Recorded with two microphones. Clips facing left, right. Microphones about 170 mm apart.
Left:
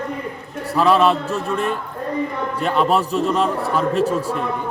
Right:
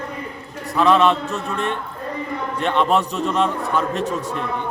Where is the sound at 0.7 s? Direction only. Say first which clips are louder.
Even; 5° left (ahead or behind).